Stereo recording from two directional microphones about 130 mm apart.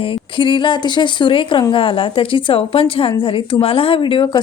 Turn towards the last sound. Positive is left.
turn(degrees=40)  # may be behind; listen again after turning